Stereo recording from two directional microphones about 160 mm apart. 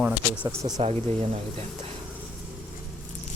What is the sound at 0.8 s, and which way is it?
Speech, 40° right (ahead or behind).